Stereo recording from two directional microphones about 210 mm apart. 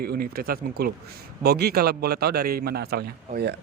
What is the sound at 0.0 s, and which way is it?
Speech, 45° right (ahead or behind).